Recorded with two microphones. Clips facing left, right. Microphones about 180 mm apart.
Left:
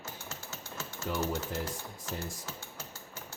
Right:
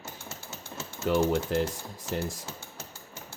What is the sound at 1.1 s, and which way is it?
Speech, 80° right.